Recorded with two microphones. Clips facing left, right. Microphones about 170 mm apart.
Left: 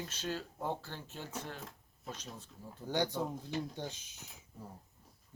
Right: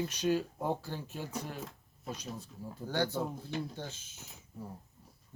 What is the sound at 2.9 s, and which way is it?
Speech, 15° left (ahead or behind).